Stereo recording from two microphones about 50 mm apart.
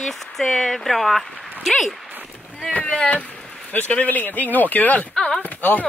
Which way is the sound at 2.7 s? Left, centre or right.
Left.